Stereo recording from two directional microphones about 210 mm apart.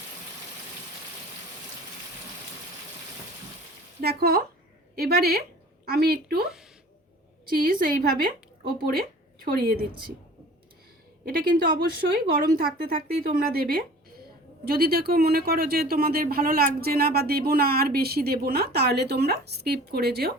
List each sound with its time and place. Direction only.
4.0 s speech: 45° right (ahead or behind)
7.5 s a woman's voice: 45° right (ahead or behind)
11.3 s speech: 45° right (ahead or behind)